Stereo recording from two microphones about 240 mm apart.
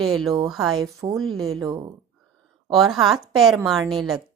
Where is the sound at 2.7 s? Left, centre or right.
Centre.